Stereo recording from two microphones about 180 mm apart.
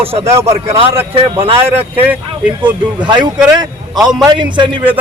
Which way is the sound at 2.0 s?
10° right (ahead or behind).